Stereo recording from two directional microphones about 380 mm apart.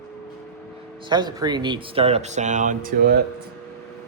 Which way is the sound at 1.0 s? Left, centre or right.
Centre.